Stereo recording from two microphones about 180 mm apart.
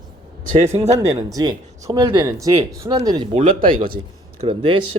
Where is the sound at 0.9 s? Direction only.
20° right (ahead or behind).